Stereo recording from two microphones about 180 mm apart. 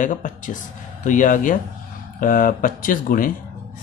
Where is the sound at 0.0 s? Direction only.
45° left (ahead or behind).